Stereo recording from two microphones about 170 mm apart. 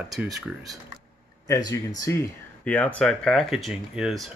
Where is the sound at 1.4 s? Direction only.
20° left (ahead or behind).